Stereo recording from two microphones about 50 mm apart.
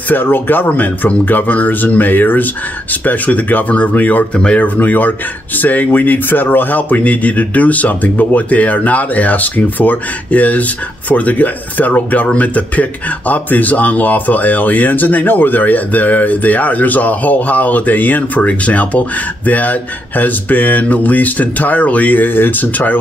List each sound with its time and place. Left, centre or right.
0.1 s speech: left
4.4 s speech: left
4.7 s speech: left